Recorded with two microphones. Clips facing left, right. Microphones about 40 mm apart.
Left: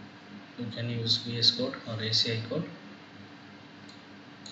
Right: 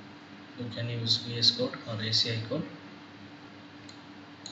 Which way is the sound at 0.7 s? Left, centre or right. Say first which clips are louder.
Left 1 dB; centre.